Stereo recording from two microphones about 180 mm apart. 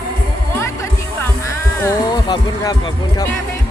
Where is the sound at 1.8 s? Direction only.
20° left (ahead or behind).